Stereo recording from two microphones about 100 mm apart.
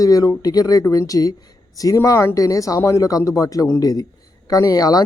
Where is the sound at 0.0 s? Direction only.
35° left (ahead or behind).